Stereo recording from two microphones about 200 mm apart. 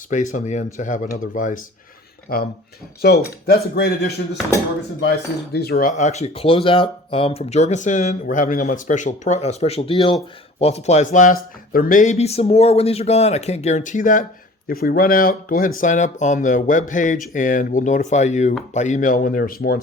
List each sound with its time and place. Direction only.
0.1 s speech: 40° left (ahead or behind)
3.0 s speech: 50° left (ahead or behind)
5.5 s speech: 50° left (ahead or behind)
5.9 s speech: 35° left (ahead or behind)